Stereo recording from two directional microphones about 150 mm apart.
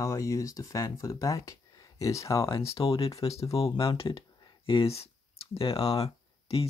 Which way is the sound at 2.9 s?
40° left (ahead or behind).